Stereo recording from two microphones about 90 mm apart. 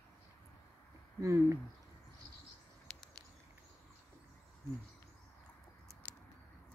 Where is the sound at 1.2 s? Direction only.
35° right (ahead or behind).